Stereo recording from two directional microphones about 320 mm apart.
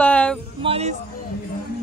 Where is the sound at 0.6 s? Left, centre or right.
Centre.